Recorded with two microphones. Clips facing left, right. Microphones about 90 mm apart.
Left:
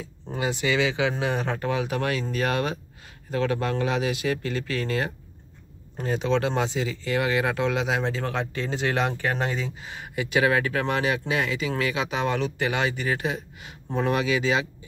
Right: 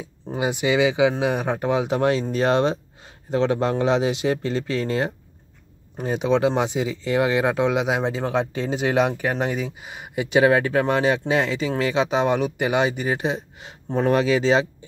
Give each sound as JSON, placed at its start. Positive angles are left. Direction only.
{"t": 0.3, "sound": "speech", "side_deg": -15}